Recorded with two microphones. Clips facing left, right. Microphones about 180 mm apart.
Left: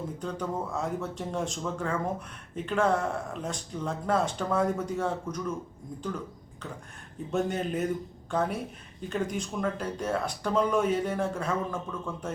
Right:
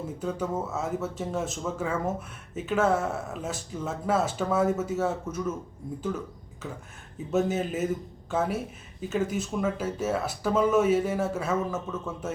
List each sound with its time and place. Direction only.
0.2 s a man's voice: 5° right (ahead or behind)
7.3 s a man's voice: 5° right (ahead or behind)